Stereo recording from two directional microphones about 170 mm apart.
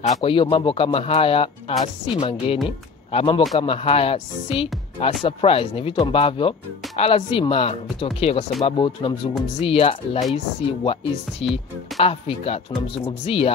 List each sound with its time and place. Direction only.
0.0 s speech: 40° left (ahead or behind)